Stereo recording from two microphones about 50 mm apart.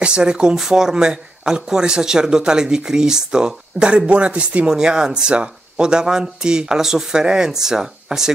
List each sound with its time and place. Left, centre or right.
0.0 s speech: centre